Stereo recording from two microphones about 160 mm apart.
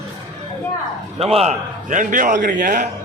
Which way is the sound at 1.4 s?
55° right (ahead or behind).